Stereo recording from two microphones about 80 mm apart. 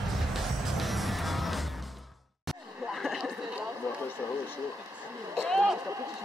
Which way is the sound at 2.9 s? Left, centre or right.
Centre.